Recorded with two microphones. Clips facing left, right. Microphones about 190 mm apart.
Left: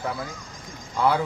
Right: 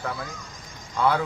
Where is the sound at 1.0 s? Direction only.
10° left (ahead or behind).